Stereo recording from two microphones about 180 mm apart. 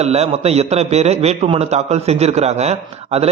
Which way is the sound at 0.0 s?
35° right (ahead or behind).